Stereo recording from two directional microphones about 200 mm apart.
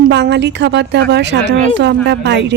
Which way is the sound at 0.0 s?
60° right (ahead or behind).